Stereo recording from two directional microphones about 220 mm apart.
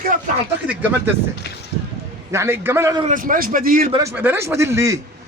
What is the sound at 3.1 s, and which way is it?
Speech, 40° right (ahead or behind).